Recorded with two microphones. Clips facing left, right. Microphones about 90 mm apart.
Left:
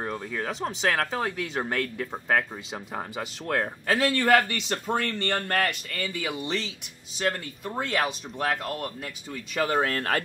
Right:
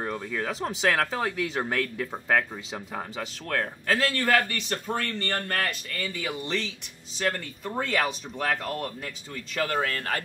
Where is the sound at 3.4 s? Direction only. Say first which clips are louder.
Left 1 dB; 20° left (ahead or behind); by 8.9 s 5° left (ahead or behind).